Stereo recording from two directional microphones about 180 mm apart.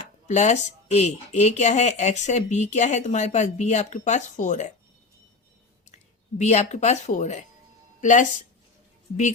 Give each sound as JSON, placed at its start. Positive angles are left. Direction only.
{"t": 0.3, "sound": "speech", "side_deg": 40}
{"t": 6.4, "sound": "speech", "side_deg": 40}